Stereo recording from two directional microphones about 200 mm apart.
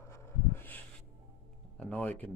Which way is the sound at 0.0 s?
15° left (ahead or behind).